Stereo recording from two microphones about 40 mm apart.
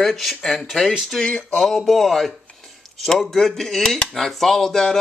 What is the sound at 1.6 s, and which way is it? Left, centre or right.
Speech, centre.